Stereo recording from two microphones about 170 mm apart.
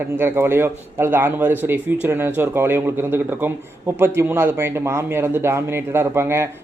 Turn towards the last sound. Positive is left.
turn(degrees=-15)  # may be behind; listen again after turning